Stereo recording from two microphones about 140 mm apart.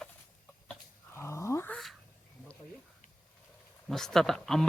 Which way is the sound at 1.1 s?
20° left (ahead or behind).